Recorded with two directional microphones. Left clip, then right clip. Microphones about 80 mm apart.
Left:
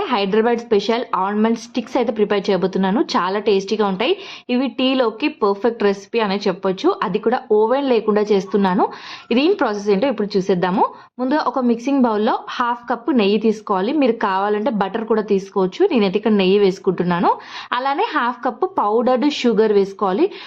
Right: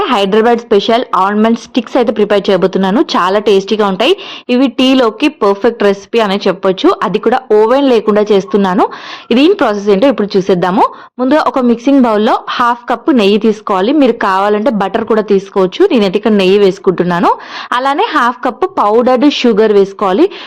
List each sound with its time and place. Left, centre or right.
0.0 s a woman's voice: right